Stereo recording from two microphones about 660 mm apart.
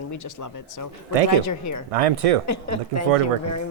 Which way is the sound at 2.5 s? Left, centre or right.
Left.